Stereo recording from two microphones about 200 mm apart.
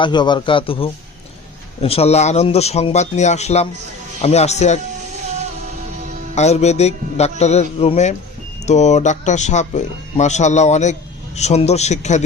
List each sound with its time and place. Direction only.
0.0 s a man's voice: 20° left (ahead or behind)
6.3 s speech: 35° left (ahead or behind)